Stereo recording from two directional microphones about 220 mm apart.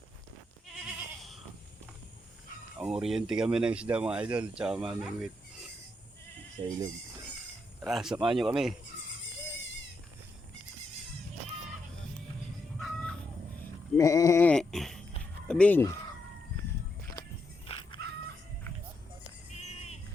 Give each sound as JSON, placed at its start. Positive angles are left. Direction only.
{"t": 2.7, "sound": "speech", "side_deg": -5}
{"t": 6.6, "sound": "speech", "side_deg": -20}
{"t": 7.9, "sound": "speech", "side_deg": 0}
{"t": 12.8, "sound": "chicken", "side_deg": 5}
{"t": 13.9, "sound": "sheep", "side_deg": 15}
{"t": 15.4, "sound": "speech", "side_deg": 5}
{"t": 17.2, "sound": "music", "side_deg": 15}
{"t": 17.7, "sound": "a sound", "side_deg": 25}
{"t": 19.5, "sound": "a sound", "side_deg": 30}